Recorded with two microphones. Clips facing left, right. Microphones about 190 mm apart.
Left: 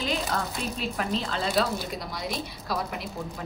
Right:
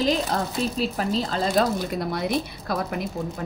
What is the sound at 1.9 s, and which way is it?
A woman's voice, 55° right (ahead or behind).